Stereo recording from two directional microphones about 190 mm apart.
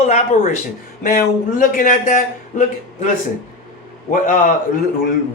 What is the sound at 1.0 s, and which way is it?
A man's voice, 50° left (ahead or behind).